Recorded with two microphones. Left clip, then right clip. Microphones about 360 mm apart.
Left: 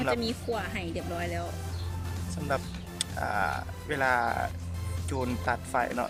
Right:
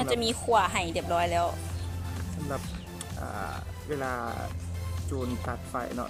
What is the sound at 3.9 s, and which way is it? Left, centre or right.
Speech, left.